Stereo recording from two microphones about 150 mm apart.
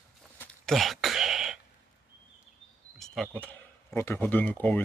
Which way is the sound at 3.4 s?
10° left (ahead or behind).